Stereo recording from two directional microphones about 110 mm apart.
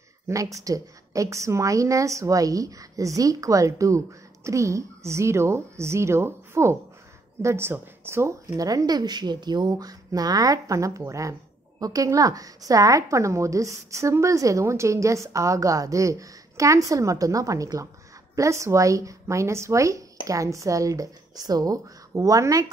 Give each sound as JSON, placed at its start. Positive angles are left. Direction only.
{"t": 0.3, "sound": "a woman's voice", "side_deg": -30}